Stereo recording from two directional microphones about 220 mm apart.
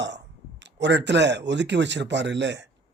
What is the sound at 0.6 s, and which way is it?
Speech, 55° right (ahead or behind).